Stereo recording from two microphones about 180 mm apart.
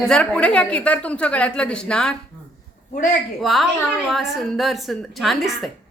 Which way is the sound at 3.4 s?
Centre (ahead or behind).